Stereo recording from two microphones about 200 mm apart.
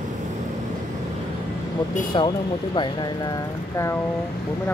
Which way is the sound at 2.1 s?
25° left (ahead or behind).